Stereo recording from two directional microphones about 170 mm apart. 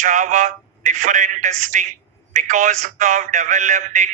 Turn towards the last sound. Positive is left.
turn(degrees=-50)  # may be behind; listen again after turning